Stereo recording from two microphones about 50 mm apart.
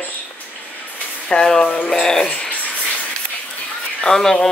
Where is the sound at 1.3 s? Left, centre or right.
Centre.